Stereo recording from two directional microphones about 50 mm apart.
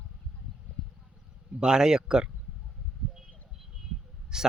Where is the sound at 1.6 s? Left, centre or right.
Centre.